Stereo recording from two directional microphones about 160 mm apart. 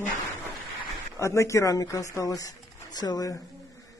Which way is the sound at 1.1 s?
20° left (ahead or behind).